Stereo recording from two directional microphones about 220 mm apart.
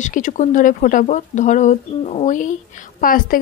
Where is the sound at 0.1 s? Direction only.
35° left (ahead or behind).